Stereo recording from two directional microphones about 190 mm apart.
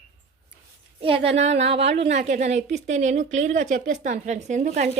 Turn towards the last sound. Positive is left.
turn(degrees=-40)  # may be behind; listen again after turning